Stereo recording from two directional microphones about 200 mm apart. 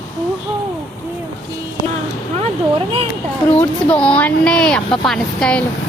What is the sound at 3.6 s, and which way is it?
Speech, 5° left (ahead or behind).